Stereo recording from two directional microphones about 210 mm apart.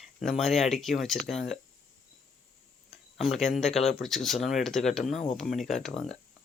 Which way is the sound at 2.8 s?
Centre (ahead or behind).